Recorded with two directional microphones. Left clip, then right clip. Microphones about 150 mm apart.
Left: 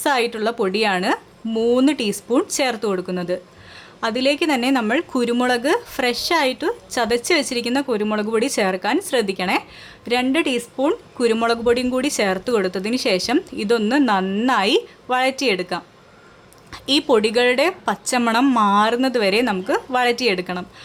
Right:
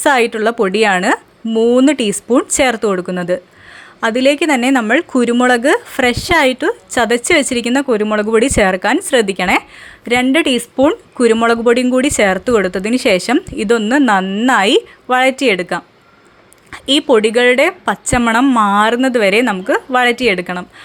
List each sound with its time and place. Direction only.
0.0 s a woman's voice: 35° right (ahead or behind)